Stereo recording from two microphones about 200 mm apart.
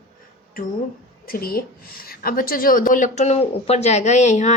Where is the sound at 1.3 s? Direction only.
45° left (ahead or behind).